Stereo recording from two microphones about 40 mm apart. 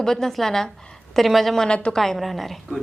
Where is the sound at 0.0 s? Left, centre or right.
Centre.